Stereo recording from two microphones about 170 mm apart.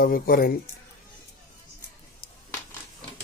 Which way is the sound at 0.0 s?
60° left (ahead or behind).